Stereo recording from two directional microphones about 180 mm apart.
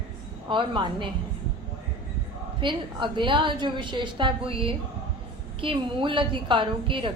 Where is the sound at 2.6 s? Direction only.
25° right (ahead or behind).